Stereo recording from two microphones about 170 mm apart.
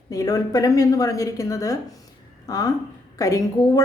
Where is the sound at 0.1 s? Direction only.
20° left (ahead or behind).